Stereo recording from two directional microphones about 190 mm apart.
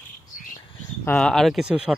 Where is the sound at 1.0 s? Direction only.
5° left (ahead or behind).